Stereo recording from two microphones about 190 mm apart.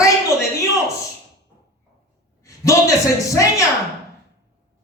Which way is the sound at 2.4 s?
15° left (ahead or behind).